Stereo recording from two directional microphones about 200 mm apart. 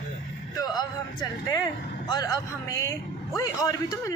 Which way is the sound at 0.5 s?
20° left (ahead or behind).